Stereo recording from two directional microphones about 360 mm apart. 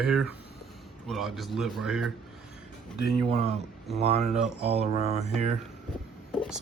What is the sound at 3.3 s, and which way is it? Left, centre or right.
Speech, centre.